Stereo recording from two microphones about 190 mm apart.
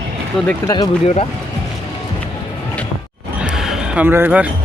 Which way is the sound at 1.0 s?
30° left (ahead or behind).